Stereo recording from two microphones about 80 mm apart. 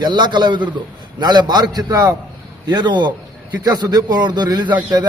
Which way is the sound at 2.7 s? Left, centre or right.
Right.